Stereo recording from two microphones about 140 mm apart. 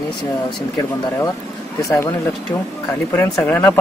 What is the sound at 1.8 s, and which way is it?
Speech, 20° left (ahead or behind).